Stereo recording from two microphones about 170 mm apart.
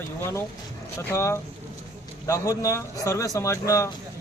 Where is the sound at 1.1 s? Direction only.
15° left (ahead or behind).